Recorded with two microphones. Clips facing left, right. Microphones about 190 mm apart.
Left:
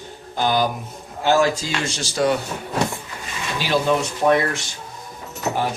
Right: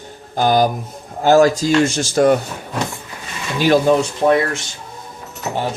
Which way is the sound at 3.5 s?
50° right (ahead or behind).